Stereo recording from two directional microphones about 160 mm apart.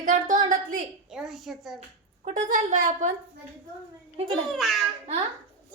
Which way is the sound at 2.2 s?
55° right (ahead or behind).